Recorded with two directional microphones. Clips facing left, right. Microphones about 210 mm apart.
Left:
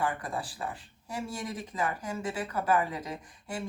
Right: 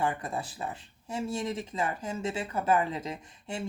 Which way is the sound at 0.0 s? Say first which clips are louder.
Right 1 dB; 25° right (ahead or behind).